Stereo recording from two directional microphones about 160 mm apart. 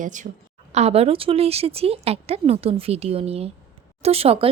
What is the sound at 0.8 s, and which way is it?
Speech, 40° right (ahead or behind).